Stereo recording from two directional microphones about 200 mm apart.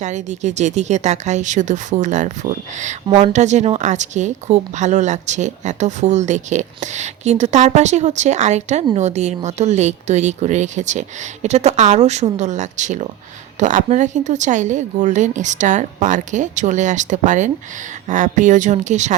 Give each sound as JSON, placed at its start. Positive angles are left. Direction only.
{"t": 0.0, "sound": "speech", "side_deg": -35}